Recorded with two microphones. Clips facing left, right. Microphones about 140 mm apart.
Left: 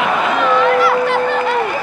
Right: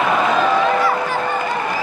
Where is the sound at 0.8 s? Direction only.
75° left (ahead or behind).